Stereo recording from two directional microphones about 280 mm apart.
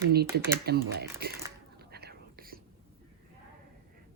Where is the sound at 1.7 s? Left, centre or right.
Right.